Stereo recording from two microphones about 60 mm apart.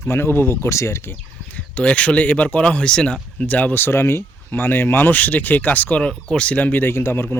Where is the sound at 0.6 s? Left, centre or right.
Left.